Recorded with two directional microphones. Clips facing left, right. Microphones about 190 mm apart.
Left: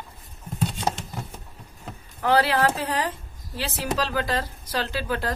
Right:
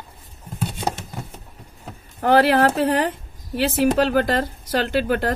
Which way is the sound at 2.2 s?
50° right (ahead or behind).